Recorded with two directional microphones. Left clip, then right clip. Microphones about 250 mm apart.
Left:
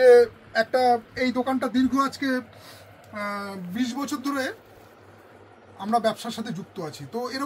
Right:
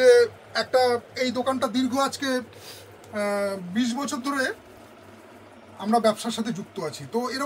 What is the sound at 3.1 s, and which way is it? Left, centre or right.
Speech, right.